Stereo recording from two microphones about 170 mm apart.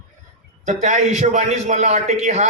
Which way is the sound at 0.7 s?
40° right (ahead or behind).